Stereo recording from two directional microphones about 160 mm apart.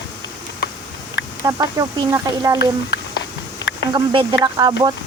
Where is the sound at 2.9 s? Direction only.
90° left.